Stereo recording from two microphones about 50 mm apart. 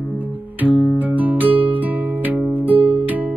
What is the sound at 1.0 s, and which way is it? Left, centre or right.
Music, right.